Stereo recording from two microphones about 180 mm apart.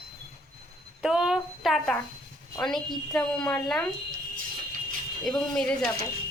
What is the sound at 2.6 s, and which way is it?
Speech, centre (ahead or behind).